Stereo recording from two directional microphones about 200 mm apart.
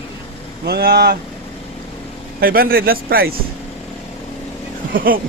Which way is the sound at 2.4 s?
45° right (ahead or behind).